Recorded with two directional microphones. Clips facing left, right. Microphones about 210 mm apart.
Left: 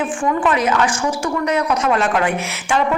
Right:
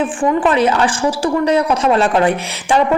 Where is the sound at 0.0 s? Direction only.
30° right (ahead or behind).